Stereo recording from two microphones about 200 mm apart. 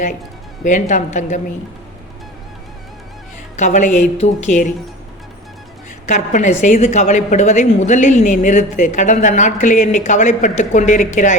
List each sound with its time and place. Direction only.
0.6 s a woman's voice: 40° left (ahead or behind)
3.6 s a woman's voice: 40° left (ahead or behind)
6.1 s a woman's voice: 40° left (ahead or behind)